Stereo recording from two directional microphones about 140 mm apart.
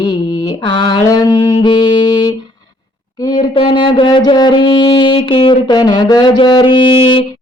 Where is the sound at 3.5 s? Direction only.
35° left (ahead or behind).